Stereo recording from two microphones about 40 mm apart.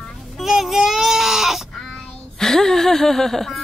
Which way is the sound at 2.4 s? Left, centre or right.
Centre.